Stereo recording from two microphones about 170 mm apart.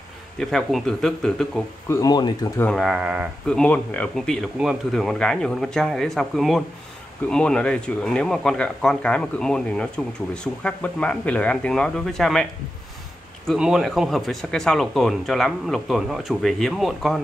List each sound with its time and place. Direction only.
0.4 s speech: 5° left (ahead or behind)
1.9 s speech: 20° left (ahead or behind)
2.6 s speech: centre (ahead or behind)
3.4 s speech: 5° left (ahead or behind)
13.5 s speech: centre (ahead or behind)